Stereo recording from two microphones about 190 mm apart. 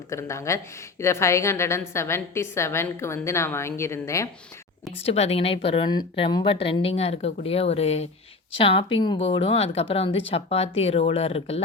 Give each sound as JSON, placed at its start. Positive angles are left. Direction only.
{"t": 0.1, "sound": "a woman's voice", "side_deg": 15}
{"t": 5.0, "sound": "speech", "side_deg": 30}